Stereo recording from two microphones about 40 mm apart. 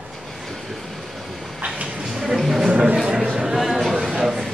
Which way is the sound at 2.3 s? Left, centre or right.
Centre.